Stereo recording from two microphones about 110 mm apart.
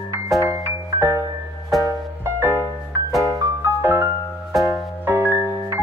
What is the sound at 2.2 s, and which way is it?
Music, 20° right (ahead or behind).